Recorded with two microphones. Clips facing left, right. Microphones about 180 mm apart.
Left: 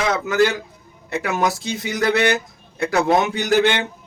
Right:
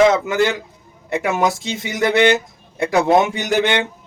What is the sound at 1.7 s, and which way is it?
Speech, 20° right (ahead or behind).